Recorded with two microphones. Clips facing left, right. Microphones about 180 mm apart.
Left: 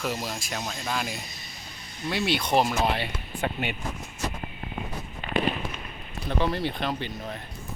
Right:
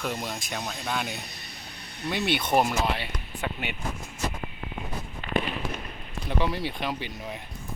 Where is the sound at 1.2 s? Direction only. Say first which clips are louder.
Even; 60° right (ahead or behind).